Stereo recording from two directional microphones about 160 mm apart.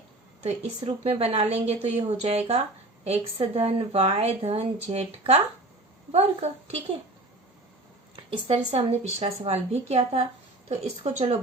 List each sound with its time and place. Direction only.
0.4 s speech: 40° right (ahead or behind)
8.1 s speech: 40° right (ahead or behind)